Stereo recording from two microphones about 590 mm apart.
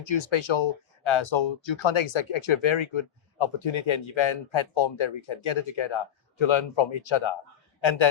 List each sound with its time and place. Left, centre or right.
0.0 s speech: left